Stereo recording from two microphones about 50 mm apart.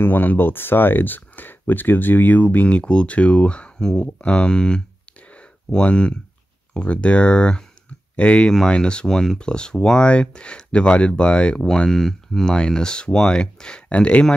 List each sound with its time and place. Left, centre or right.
0.0 s speech: left